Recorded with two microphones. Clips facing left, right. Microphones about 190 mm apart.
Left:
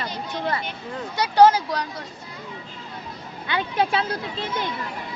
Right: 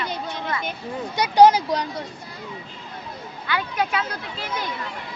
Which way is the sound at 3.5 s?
25° left (ahead or behind).